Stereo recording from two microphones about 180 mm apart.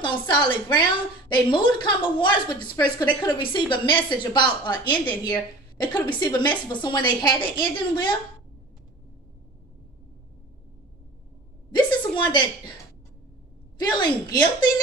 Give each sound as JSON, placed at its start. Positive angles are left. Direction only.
{"t": 0.0, "sound": "a woman's voice", "side_deg": 25}
{"t": 11.7, "sound": "a sound", "side_deg": 25}
{"t": 13.7, "sound": "a woman's voice", "side_deg": 25}